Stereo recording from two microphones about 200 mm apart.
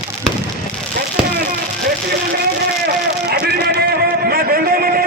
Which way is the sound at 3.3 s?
50° right (ahead or behind).